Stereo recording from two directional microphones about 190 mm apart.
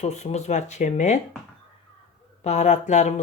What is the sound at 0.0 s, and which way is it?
Speech, 35° left (ahead or behind).